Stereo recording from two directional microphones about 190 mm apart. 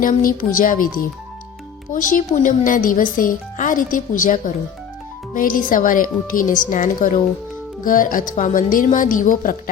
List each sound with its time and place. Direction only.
0.0 s speech: 45° left (ahead or behind)